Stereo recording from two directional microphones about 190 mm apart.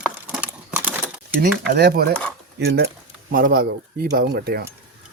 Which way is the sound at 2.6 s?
65° right (ahead or behind).